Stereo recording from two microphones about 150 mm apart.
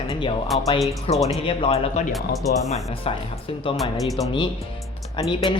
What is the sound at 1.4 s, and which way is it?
Speech, 40° left (ahead or behind).